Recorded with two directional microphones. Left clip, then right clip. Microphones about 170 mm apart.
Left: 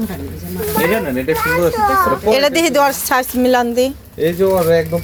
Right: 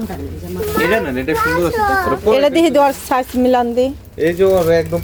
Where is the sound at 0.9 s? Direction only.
20° right (ahead or behind).